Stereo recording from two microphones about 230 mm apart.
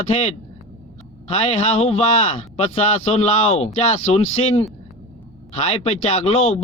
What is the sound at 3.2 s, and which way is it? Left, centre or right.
Speech, left.